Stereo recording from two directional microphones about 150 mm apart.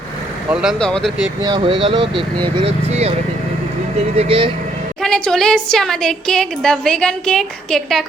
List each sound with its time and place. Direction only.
0.5 s a woman's voice: centre (ahead or behind)
1.4 s speech: 30° right (ahead or behind)
4.2 s speech: 40° right (ahead or behind)
5.0 s a woman's voice: 5° left (ahead or behind)